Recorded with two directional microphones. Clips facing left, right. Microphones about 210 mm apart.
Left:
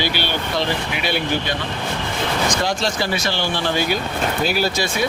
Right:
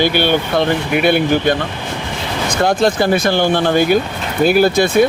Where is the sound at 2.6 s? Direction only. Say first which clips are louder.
Right 8 dB; 55° right (ahead or behind).